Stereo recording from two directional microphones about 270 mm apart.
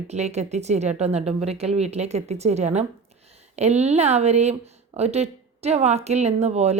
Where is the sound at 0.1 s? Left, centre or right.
Right.